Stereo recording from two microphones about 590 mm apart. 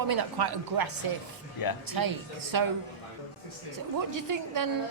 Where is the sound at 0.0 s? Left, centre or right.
Right.